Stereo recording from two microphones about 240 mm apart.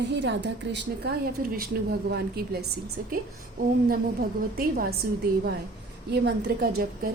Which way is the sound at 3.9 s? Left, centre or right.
Right.